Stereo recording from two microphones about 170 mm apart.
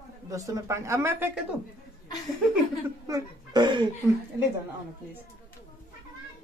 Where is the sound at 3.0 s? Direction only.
20° right (ahead or behind).